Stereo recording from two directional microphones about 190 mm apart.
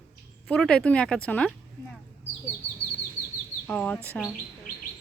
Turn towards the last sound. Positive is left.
turn(degrees=10)  # may be behind; listen again after turning